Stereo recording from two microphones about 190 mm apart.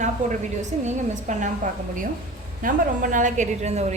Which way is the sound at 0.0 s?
40° right (ahead or behind).